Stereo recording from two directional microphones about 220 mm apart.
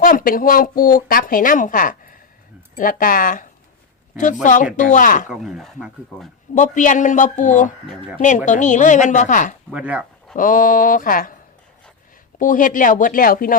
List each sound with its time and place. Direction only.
0.0 s a woman's voice: 40° left (ahead or behind)
4.4 s a woman's voice: 35° left (ahead or behind)
5.3 s speech: centre (ahead or behind)
6.5 s a woman's voice: 35° left (ahead or behind)
9.7 s speech: 5° right (ahead or behind)
10.3 s a woman's voice: 40° left (ahead or behind)
12.4 s a woman's voice: 35° left (ahead or behind)